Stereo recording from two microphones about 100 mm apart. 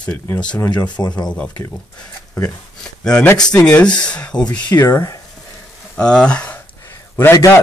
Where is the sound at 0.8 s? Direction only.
45° left (ahead or behind).